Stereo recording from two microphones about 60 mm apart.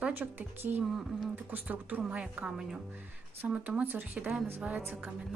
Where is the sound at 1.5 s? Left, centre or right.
Right.